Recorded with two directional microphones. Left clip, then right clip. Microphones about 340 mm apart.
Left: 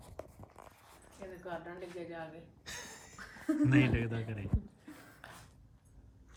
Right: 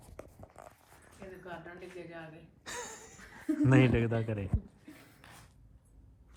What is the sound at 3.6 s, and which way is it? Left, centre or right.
Speech, centre.